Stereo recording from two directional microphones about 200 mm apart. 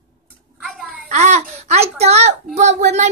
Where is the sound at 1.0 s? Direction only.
35° right (ahead or behind).